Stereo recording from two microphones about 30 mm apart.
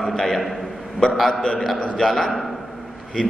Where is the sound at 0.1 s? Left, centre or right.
Centre.